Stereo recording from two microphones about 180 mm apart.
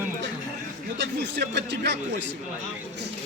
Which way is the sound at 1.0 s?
75° right (ahead or behind).